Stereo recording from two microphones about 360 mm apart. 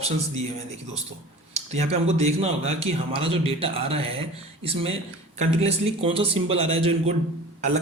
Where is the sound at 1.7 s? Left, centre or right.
Centre.